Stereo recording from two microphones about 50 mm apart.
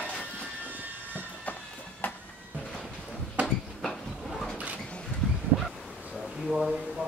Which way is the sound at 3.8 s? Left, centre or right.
Centre.